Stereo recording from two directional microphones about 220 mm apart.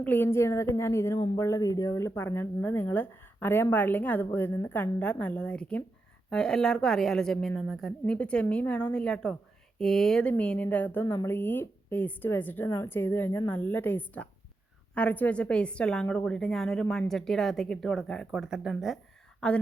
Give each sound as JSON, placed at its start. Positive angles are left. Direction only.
{"t": 0.0, "sound": "a woman's voice", "side_deg": 10}